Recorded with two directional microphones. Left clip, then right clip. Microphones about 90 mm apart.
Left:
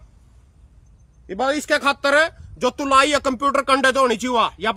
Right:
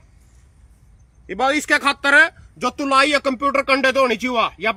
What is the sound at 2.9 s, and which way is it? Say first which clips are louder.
Speech: even; 85° left.